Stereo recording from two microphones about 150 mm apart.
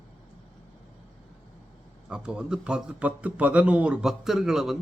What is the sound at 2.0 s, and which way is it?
A man's voice, 5° right (ahead or behind).